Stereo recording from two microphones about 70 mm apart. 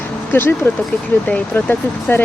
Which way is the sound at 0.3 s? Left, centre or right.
Left.